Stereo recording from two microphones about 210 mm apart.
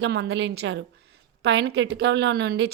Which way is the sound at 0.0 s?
55° right (ahead or behind).